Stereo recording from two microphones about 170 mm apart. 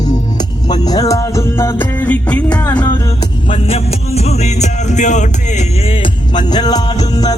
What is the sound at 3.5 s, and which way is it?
Music, 35° left (ahead or behind).